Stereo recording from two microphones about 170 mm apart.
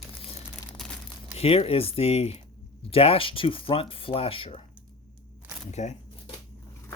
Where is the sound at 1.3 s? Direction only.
35° left (ahead or behind).